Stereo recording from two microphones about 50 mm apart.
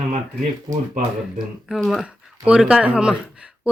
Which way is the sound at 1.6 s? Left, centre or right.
Centre.